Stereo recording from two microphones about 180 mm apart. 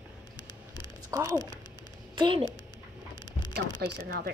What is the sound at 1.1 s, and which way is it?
A child's voice, 20° right (ahead or behind).